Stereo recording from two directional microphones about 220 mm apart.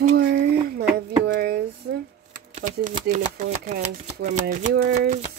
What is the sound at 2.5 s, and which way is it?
Speech, 35° right (ahead or behind).